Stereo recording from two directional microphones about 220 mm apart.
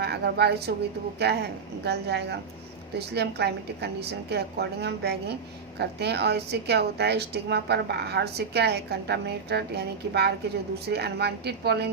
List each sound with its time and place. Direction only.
0.0 s a woman's voice: 50° right (ahead or behind)